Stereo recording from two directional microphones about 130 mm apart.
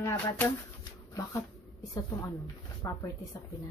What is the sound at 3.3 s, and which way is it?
Speech, 25° left (ahead or behind).